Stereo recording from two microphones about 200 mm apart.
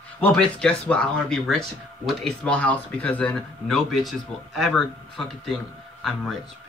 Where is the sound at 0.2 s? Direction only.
5° left (ahead or behind).